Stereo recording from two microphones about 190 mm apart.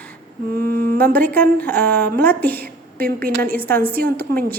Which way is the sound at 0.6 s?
50° right (ahead or behind).